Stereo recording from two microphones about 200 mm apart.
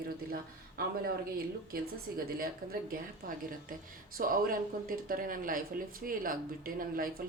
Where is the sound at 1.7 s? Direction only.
45° right (ahead or behind).